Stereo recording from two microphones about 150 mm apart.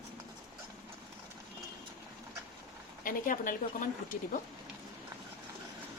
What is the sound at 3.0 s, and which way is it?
Speech, 65° left (ahead or behind).